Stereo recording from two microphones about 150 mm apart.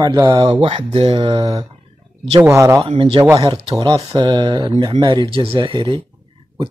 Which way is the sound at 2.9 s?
35° right (ahead or behind).